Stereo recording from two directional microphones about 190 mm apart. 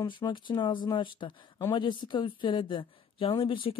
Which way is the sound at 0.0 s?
25° left (ahead or behind).